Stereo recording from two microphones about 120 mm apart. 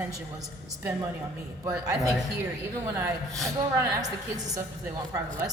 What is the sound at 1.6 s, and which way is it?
Speech, 30° right (ahead or behind).